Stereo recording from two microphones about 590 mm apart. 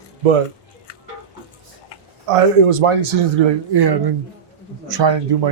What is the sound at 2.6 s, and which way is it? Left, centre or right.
Speech, right.